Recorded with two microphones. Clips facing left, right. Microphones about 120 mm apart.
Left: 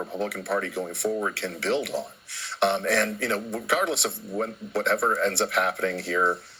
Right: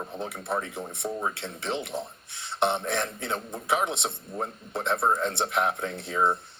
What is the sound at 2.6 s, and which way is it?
Speech, 20° right (ahead or behind).